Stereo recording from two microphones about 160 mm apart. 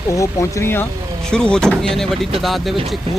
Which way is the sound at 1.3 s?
5° left (ahead or behind).